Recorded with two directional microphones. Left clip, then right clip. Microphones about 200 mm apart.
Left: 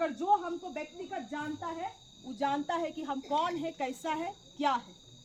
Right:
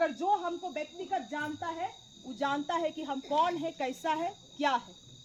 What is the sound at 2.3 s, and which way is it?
Speech, 10° left (ahead or behind).